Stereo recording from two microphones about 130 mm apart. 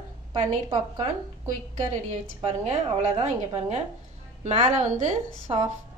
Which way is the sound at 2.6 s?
55° right (ahead or behind).